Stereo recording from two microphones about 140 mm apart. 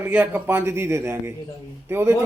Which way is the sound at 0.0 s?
10° right (ahead or behind).